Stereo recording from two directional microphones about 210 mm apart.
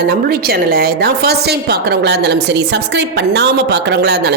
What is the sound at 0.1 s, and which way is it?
A woman's voice, 45° right (ahead or behind).